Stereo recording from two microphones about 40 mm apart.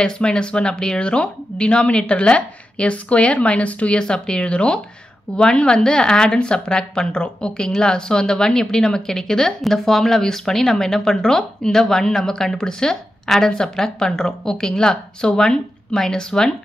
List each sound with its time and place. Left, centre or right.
0.0 s a woman's voice: left